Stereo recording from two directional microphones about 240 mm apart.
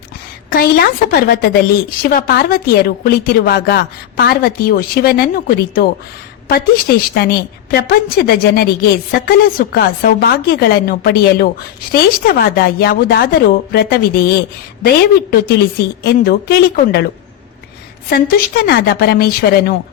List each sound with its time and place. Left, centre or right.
0.5 s a woman's voice: left
15.3 s a woman's voice: left
18.1 s a woman's voice: left